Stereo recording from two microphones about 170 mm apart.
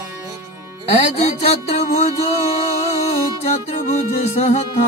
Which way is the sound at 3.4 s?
40° left (ahead or behind).